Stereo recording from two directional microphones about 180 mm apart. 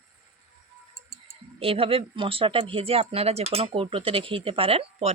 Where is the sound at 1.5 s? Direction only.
30° right (ahead or behind).